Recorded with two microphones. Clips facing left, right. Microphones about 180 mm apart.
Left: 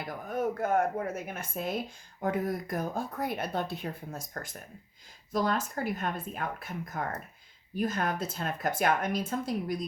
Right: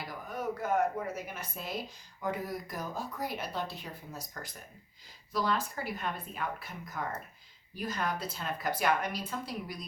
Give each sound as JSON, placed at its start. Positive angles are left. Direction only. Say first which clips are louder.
{"t": 0.0, "sound": "speech", "louder": "left 5 dB", "side_deg": 50}
{"t": 5.3, "sound": "speech", "louder": "left 3 dB", "side_deg": 45}